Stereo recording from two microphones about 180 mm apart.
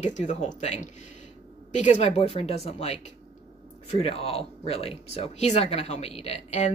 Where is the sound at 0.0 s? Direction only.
40° left (ahead or behind).